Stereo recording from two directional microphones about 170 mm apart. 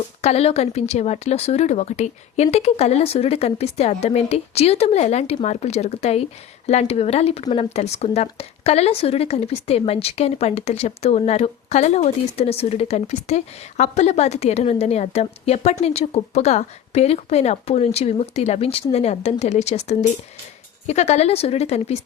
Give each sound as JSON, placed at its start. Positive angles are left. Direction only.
{"t": 0.2, "sound": "speech", "side_deg": 40}